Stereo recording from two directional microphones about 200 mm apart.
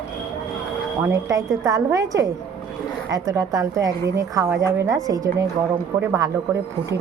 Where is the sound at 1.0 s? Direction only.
15° right (ahead or behind).